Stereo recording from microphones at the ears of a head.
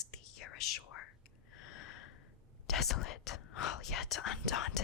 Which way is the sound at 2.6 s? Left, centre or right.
Left.